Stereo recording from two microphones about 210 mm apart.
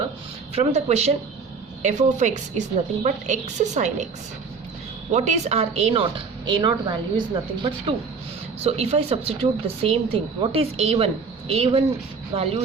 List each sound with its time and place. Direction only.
0.5 s a woman's voice: 30° right (ahead or behind)
5.1 s speech: 30° right (ahead or behind)
8.6 s speech: 30° right (ahead or behind)